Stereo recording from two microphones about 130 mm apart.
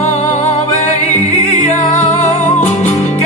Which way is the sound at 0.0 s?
65° left (ahead or behind).